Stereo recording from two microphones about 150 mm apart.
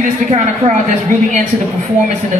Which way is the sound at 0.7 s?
55° right (ahead or behind).